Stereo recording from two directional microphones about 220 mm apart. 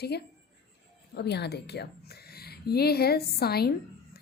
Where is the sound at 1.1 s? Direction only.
50° left (ahead or behind).